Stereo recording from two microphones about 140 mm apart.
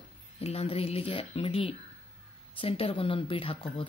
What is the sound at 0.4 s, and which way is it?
Speech, 45° left (ahead or behind).